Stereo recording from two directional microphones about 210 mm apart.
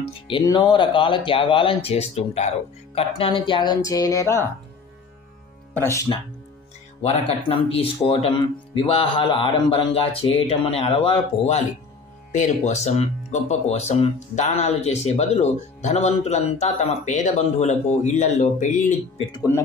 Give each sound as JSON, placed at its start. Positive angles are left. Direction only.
{"t": 0.0, "sound": "speech", "side_deg": 20}
{"t": 5.8, "sound": "speech", "side_deg": 15}
{"t": 7.0, "sound": "speech", "side_deg": 30}
{"t": 19.3, "sound": "speech", "side_deg": 15}